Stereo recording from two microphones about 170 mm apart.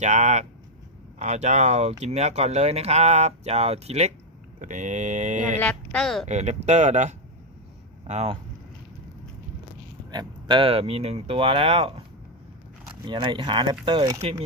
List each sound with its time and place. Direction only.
0.0 s speech: 45° right (ahead or behind)
5.5 s speech: 5° left (ahead or behind)
6.2 s speech: 40° right (ahead or behind)
10.1 s speech: 25° right (ahead or behind)
13.1 s speech: 25° right (ahead or behind)